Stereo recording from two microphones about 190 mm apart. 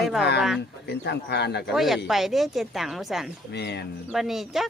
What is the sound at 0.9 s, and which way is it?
Speech, 60° left (ahead or behind).